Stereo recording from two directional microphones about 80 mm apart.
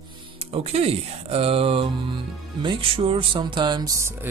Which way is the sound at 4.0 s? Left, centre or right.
Right.